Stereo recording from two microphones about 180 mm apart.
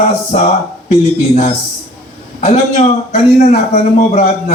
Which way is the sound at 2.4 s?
40° left (ahead or behind).